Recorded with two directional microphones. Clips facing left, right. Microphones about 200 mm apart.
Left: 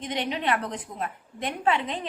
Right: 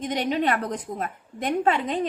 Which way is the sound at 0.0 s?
40° right (ahead or behind).